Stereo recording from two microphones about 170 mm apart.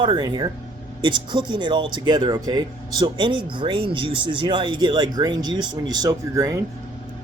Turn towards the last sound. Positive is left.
turn(degrees=-20)  # may be behind; listen again after turning